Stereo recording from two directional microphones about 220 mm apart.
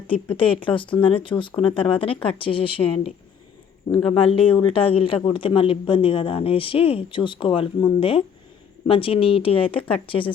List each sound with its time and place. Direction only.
0.3 s a man's voice: 25° left (ahead or behind)